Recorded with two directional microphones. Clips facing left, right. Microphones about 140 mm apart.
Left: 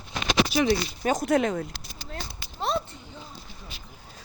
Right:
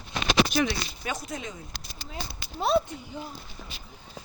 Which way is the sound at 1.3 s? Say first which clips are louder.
Left 14 dB; 70° left (ahead or behind).